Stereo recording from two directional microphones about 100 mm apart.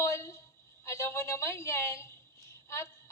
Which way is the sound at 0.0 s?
30° left (ahead or behind).